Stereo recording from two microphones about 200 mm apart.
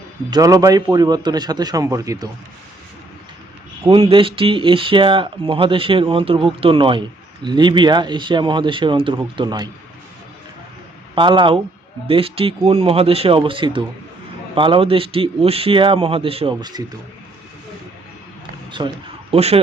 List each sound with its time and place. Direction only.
0.3 s speech: 20° right (ahead or behind)
3.8 s speech: 25° right (ahead or behind)
11.1 s speech: 25° right (ahead or behind)
18.8 s speech: 20° right (ahead or behind)
19.3 s speech: 30° right (ahead or behind)